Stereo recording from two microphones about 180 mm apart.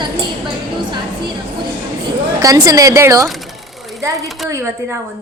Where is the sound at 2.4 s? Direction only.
20° right (ahead or behind).